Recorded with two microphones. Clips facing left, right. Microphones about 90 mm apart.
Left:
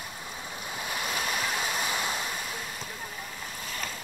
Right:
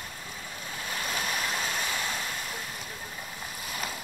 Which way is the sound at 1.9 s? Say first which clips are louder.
Left 2 dB; 15° left (ahead or behind).